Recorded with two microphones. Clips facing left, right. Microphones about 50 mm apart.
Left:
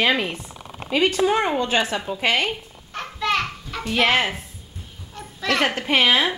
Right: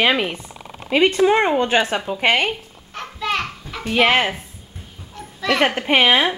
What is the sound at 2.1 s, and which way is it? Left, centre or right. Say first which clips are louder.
Speech: right 4 dB; right.